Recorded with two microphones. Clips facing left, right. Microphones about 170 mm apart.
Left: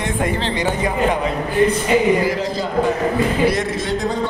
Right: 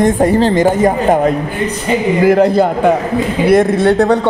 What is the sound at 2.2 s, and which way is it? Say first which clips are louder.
A man's voice: right 12 dB; 60° right (ahead or behind).